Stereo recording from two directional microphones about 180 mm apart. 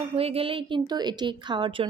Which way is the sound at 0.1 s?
35° right (ahead or behind).